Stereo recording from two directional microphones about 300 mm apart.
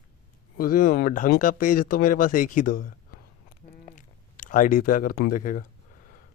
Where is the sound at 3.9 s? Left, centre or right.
Left.